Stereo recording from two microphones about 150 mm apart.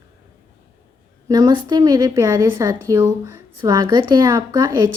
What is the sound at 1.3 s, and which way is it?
Speech, 30° right (ahead or behind).